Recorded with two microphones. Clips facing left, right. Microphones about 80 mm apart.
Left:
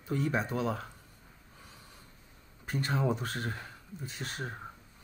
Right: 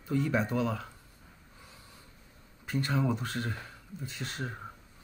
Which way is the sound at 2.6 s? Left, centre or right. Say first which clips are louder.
Right 1 dB; left.